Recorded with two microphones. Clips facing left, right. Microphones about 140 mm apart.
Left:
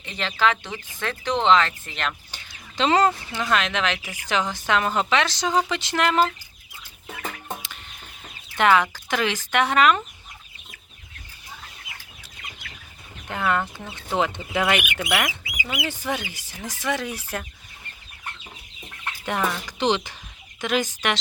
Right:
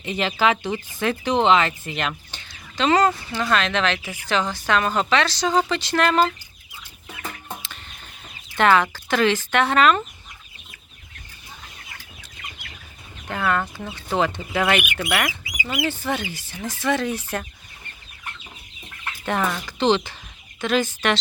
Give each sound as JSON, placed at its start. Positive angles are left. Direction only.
{"t": 0.0, "sound": "speech", "side_deg": -10}
{"t": 2.3, "sound": "chicken", "side_deg": 10}
{"t": 2.7, "sound": "speech", "side_deg": 25}
{"t": 3.5, "sound": "a woman's voice", "side_deg": 15}
{"t": 7.4, "sound": "a sound", "side_deg": 10}
{"t": 8.5, "sound": "a woman's voice", "side_deg": 10}
{"t": 13.2, "sound": "a woman's voice", "side_deg": 15}
{"t": 19.2, "sound": "a woman's voice", "side_deg": 10}